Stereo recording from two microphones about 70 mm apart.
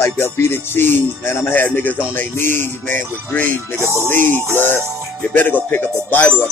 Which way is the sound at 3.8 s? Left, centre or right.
Right.